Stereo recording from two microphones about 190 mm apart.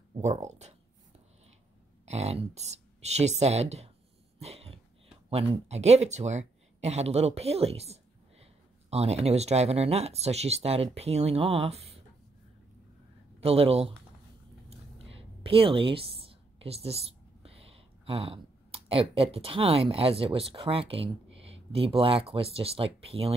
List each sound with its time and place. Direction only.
0.2 s speech: 40° right (ahead or behind)
2.0 s speech: 35° right (ahead or behind)
4.4 s throat clearing: 30° right (ahead or behind)
5.3 s speech: 35° right (ahead or behind)
13.4 s speech: 30° right (ahead or behind)
15.1 s speech: 30° right (ahead or behind)